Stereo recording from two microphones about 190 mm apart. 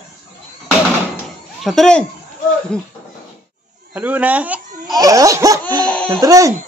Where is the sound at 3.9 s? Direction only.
10° right (ahead or behind).